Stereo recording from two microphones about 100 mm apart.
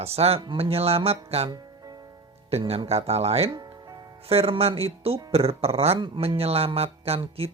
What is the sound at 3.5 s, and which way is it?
Music, 45° right (ahead or behind).